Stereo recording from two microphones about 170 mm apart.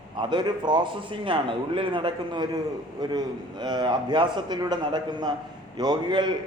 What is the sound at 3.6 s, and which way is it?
A man's voice, 25° right (ahead or behind).